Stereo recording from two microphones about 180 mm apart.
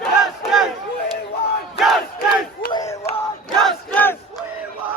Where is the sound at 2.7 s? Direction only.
15° left (ahead or behind).